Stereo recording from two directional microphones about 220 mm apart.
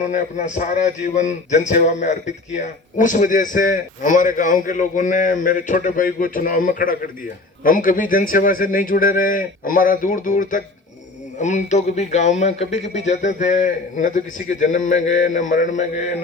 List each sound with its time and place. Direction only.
0.0 s speech: 35° left (ahead or behind)